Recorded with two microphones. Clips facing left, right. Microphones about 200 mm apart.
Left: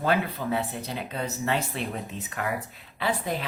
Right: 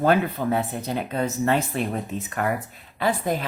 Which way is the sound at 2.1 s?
50° right (ahead or behind).